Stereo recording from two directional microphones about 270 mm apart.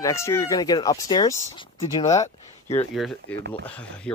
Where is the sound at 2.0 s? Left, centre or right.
Centre.